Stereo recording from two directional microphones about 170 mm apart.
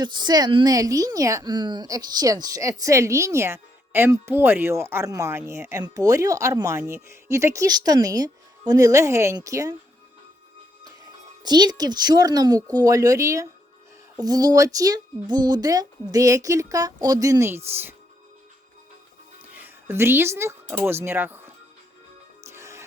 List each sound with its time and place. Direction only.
0.0 s a woman's voice: 25° right (ahead or behind)
10.8 s a woman's voice: 25° right (ahead or behind)
19.5 s music: 15° right (ahead or behind)
20.8 s speech: 15° right (ahead or behind)
22.4 s music: 15° right (ahead or behind)